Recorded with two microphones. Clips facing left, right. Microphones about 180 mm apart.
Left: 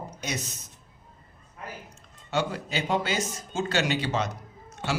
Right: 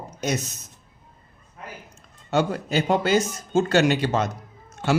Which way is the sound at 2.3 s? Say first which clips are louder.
Right 6 dB; 45° right (ahead or behind).